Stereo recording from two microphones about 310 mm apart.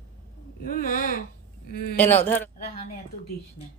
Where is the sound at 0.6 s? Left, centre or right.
Left.